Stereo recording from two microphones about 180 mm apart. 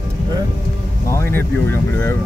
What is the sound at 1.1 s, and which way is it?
Speech, 15° left (ahead or behind).